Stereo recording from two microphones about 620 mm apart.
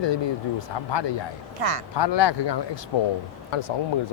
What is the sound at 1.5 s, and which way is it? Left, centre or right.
Speech, right.